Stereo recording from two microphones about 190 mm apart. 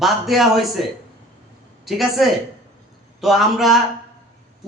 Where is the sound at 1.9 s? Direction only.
Centre (ahead or behind).